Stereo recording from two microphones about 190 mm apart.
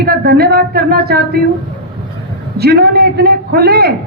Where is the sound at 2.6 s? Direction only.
55° right (ahead or behind).